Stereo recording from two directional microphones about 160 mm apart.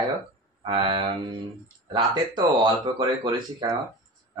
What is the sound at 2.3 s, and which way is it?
Speech, 25° right (ahead or behind).